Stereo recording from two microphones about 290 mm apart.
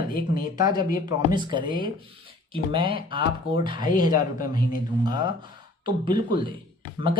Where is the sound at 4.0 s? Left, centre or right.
Centre.